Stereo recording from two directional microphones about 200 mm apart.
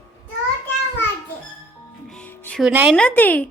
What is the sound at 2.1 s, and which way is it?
Music, 5° left (ahead or behind).